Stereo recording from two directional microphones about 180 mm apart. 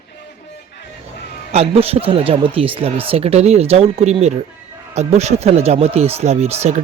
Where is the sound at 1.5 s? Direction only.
35° right (ahead or behind).